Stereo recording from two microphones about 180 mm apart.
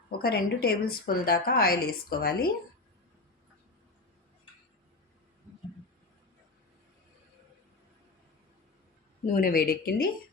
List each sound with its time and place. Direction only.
0.2 s a woman's voice: 55° left (ahead or behind)
9.2 s a woman's voice: 50° left (ahead or behind)